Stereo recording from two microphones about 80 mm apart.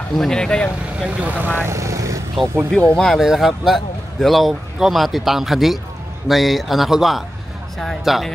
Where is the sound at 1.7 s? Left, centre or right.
Right.